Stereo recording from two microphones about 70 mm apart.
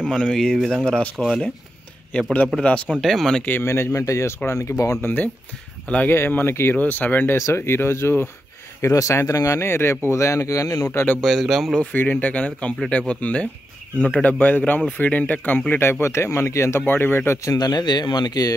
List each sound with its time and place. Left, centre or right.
0.1 s speech: centre
1.1 s speech: centre
2.6 s speech: centre
2.9 s speech: centre
3.6 s speech: left
5.0 s speech: left
7.3 s speech: left
8.8 s speech: left
10.9 s speech: left
11.2 s speech: centre
11.9 s speech: left
15.8 s speech: left
16.8 s speech: left
17.4 s speech: left